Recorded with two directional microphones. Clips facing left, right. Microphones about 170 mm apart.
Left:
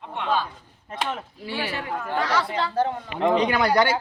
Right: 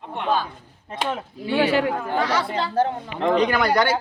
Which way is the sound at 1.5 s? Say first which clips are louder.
Right 11 dB; 65° right (ahead or behind).